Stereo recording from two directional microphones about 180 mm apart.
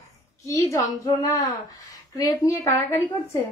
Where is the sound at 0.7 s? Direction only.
20° left (ahead or behind).